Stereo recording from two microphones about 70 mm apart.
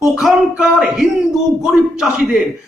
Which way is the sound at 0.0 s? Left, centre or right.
Centre.